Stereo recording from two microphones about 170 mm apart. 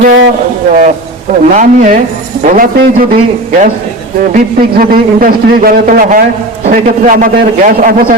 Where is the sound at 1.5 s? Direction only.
50° right (ahead or behind).